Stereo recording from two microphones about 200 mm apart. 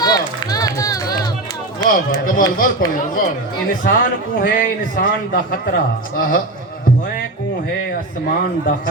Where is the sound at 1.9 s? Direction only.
45° left (ahead or behind).